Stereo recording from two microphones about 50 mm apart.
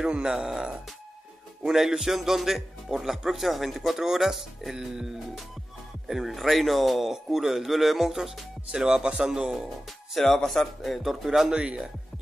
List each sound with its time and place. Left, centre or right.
0.0 s speech: centre
10.1 s speech: centre
11.0 s speech: centre
11.5 s speech: right